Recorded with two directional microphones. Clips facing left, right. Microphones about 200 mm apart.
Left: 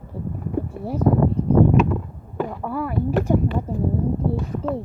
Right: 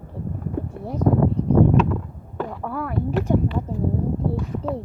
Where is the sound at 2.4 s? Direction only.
5° left (ahead or behind).